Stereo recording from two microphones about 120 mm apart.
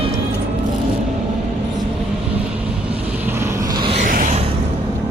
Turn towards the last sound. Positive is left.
turn(degrees=-90)